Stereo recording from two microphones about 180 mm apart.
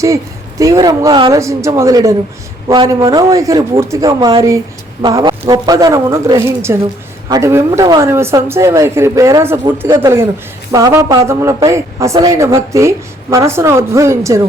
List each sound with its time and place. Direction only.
0.6 s a man's voice: 20° right (ahead or behind)